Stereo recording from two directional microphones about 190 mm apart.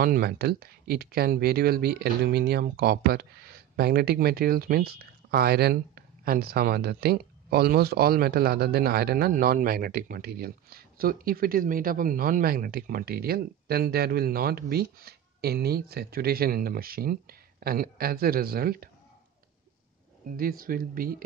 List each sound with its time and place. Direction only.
0.0 s speech: 50° right (ahead or behind)
20.2 s speech: 50° right (ahead or behind)